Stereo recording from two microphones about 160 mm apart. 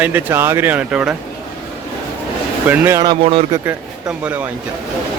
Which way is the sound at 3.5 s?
20° right (ahead or behind).